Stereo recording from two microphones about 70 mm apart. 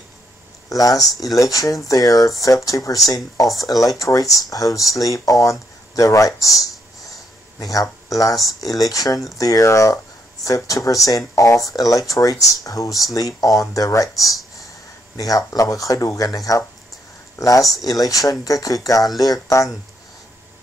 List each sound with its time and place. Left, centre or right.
0.7 s speech: left